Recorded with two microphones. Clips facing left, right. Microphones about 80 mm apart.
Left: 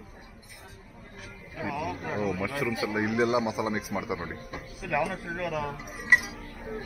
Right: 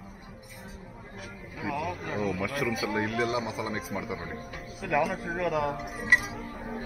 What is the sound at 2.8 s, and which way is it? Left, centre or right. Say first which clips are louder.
Speech: left 1 dB; centre.